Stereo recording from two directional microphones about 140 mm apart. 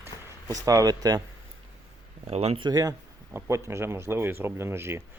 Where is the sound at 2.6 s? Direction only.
25° right (ahead or behind).